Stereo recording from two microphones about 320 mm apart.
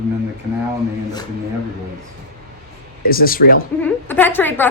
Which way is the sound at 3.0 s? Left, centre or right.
Left.